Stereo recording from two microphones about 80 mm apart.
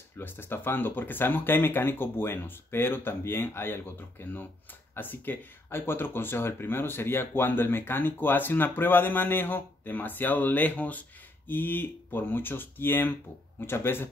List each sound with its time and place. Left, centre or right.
0.2 s speech: left